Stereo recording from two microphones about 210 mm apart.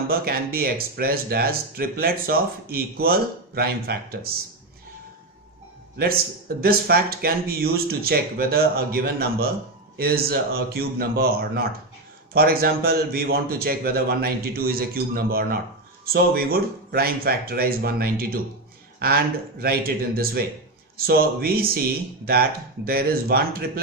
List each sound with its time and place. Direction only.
0.1 s speech: 45° right (ahead or behind)
6.6 s speech: 45° right (ahead or behind)